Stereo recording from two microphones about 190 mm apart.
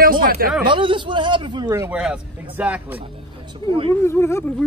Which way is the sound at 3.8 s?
15° left (ahead or behind).